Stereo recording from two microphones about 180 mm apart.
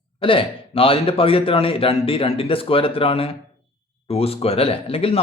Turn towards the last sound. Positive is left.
turn(degrees=30)  # may be behind; listen again after turning